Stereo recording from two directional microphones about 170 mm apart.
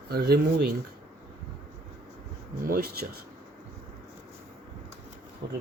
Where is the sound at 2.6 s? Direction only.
60° right (ahead or behind).